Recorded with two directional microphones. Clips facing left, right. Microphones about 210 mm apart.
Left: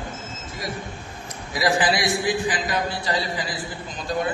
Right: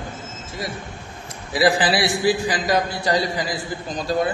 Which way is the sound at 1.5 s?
30° right (ahead or behind).